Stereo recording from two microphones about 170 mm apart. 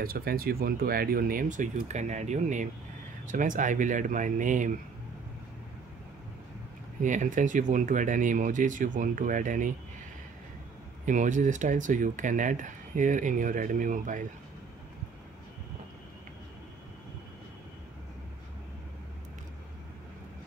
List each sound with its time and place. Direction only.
0.0 s speech: 60° right (ahead or behind)
7.0 s speech: 50° right (ahead or behind)
11.1 s speech: 45° right (ahead or behind)